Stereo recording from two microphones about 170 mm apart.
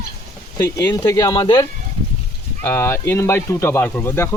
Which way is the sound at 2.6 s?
15° left (ahead or behind).